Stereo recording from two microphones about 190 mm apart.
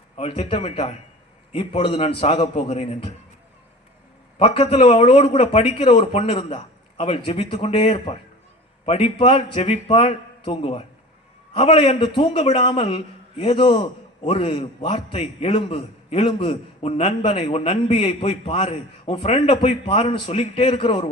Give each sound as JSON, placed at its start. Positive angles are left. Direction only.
{"t": 0.2, "sound": "a man's voice", "side_deg": 30}
{"t": 4.4, "sound": "a man's voice", "side_deg": 30}